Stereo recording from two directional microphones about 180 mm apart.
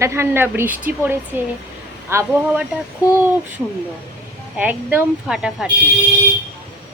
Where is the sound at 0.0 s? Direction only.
15° right (ahead or behind).